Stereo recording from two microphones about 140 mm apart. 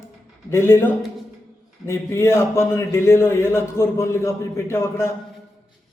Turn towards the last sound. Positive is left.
turn(degrees=20)  # may be behind; listen again after turning